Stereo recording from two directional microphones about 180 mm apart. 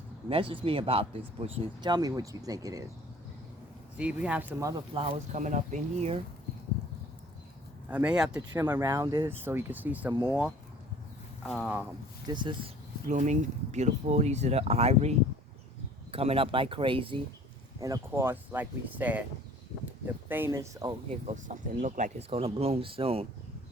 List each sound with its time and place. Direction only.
0.3 s speech: 30° right (ahead or behind)
3.9 s speech: 5° right (ahead or behind)
4.7 s speech: 30° right (ahead or behind)
7.9 s speech: 5° right (ahead or behind)
8.7 s speech: 15° right (ahead or behind)
11.4 s speech: centre (ahead or behind)
11.7 s speech: 10° right (ahead or behind)
12.3 s speech: 25° right (ahead or behind)
13.1 s speech: 45° right (ahead or behind)
16.1 s speech: 30° right (ahead or behind)
17.7 s speech: 20° right (ahead or behind)
20.2 s speech: 10° right (ahead or behind)
21.2 s speech: 45° right (ahead or behind)